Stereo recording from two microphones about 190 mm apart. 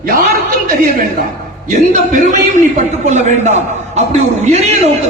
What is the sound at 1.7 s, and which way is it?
A man's voice, 40° right (ahead or behind).